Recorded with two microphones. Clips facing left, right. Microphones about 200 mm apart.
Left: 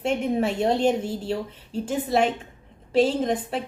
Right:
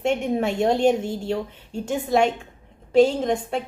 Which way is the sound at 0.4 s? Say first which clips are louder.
Right 4 dB; 5° left (ahead or behind).